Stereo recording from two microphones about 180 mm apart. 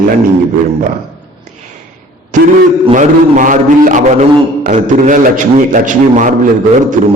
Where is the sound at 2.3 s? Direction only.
45° right (ahead or behind).